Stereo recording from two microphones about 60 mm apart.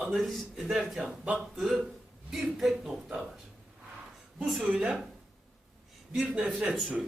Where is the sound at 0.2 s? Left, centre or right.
Centre.